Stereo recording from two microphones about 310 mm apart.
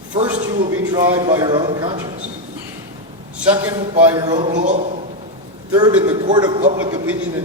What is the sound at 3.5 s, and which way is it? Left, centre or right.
A man's voice, centre.